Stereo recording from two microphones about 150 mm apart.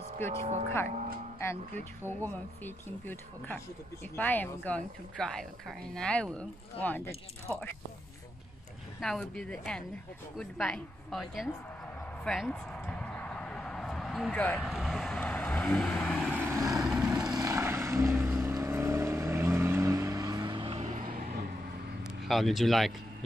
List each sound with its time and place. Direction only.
0.2 s a woman's voice: 15° left (ahead or behind)
2.0 s a woman's voice: 15° left (ahead or behind)
9.0 s speech: 5° left (ahead or behind)
12.3 s a sound: 5° left (ahead or behind)
14.6 s vehicle: centre (ahead or behind)
16.4 s vehicle: 20° right (ahead or behind)
16.7 s vehicle: centre (ahead or behind)
17.3 s vehicle: 25° right (ahead or behind)
20.9 s vehicle: 80° right
22.3 s speech: centre (ahead or behind)